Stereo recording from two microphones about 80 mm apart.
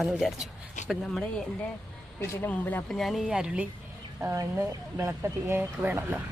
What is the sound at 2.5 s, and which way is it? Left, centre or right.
Speech, left.